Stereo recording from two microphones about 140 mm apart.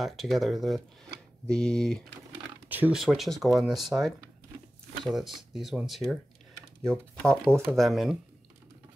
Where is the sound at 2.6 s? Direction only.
10° right (ahead or behind).